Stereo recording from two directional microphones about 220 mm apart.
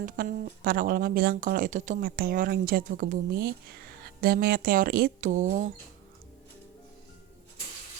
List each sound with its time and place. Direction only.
0.0 s speech: 40° right (ahead or behind)